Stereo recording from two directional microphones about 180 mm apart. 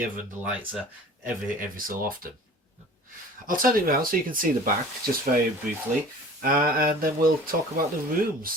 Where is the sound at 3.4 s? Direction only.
50° right (ahead or behind).